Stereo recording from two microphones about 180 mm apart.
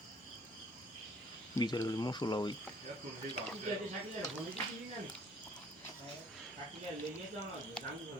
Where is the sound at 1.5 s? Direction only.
20° left (ahead or behind).